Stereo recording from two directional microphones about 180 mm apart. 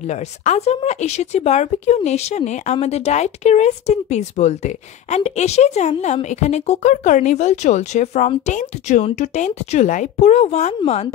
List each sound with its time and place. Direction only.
0.1 s speech: 40° left (ahead or behind)